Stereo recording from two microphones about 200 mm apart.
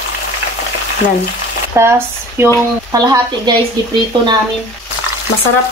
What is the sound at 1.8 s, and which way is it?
A woman's voice, 15° right (ahead or behind).